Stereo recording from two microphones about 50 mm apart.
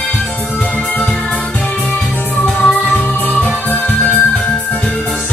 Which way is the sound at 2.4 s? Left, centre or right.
Left.